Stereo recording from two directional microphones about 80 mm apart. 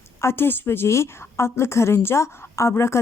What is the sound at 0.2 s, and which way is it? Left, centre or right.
A woman's voice, left.